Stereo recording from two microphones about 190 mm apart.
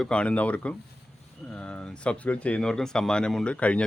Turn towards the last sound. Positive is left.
turn(degrees=5)  # may be behind; listen again after turning